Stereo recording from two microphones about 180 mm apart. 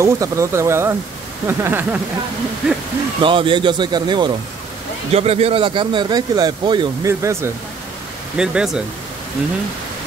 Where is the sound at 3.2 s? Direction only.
30° right (ahead or behind).